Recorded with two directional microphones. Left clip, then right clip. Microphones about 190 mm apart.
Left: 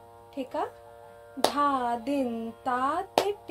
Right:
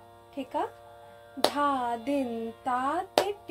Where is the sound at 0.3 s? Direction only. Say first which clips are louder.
Even; 25° left (ahead or behind).